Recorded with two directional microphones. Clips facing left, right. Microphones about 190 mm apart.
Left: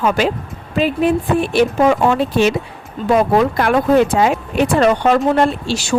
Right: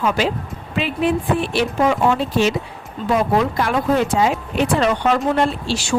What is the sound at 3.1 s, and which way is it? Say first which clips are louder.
Speech: left 4 dB; 60° left (ahead or behind).